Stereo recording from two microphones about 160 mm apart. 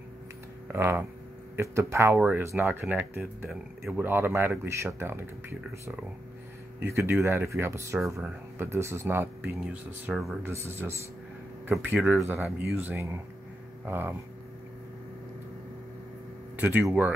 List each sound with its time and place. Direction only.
0.7 s speech: 15° right (ahead or behind)
10.0 s speech: centre (ahead or behind)
10.4 s speech: 15° right (ahead or behind)
16.5 s speech: 10° right (ahead or behind)